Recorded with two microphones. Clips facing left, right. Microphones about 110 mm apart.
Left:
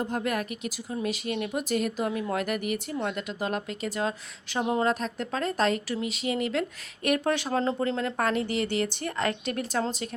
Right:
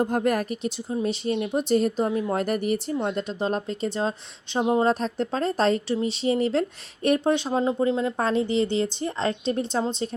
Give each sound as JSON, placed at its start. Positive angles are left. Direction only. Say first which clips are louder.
{"t": 0.0, "sound": "speech", "louder": "right 6 dB", "side_deg": -40}
{"t": 0.9, "sound": "a woman's voice", "louder": "right 4 dB", "side_deg": -30}